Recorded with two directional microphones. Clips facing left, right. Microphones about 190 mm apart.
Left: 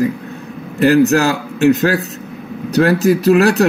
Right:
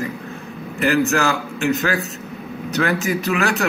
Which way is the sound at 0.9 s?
35° left (ahead or behind).